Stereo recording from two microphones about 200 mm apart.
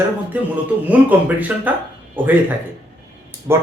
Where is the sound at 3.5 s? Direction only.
15° right (ahead or behind).